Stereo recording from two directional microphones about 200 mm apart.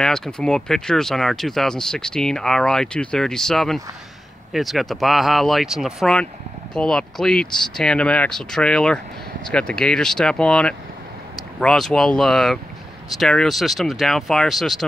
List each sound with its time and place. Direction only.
0.0 s speech: centre (ahead or behind)